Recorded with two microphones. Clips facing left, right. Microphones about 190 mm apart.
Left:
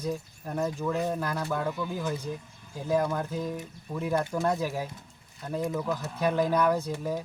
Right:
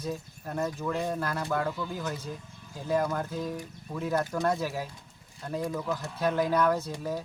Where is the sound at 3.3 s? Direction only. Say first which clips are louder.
Left 1 dB; 15° left (ahead or behind).